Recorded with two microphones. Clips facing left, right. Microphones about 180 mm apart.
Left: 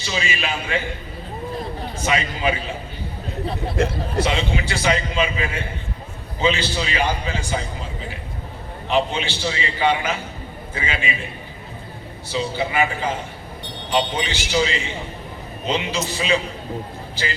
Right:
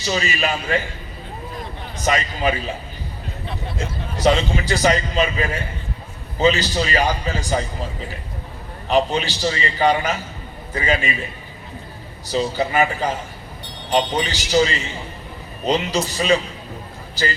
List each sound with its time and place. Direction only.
0.0 s a man's voice: 40° right (ahead or behind)
2.0 s a man's voice: 40° right (ahead or behind)
3.8 s a man's voice: 65° left (ahead or behind)
4.3 s a man's voice: 40° right (ahead or behind)
8.9 s a man's voice: 40° right (ahead or behind)
12.3 s a man's voice: 40° right (ahead or behind)